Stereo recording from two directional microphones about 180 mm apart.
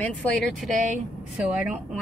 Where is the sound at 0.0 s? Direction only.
5° left (ahead or behind).